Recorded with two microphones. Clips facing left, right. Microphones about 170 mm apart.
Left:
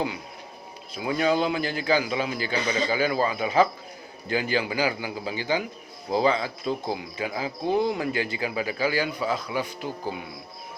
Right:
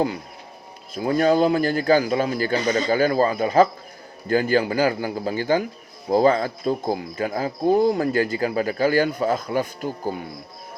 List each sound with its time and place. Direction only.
0.9 s speech: 45° right (ahead or behind)